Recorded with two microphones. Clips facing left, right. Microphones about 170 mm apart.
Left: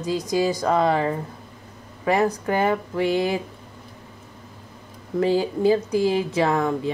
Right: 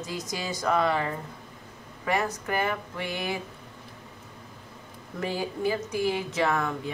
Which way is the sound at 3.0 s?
90° left.